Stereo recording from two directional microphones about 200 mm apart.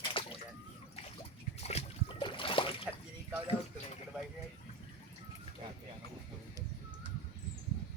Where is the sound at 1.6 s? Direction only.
30° left (ahead or behind).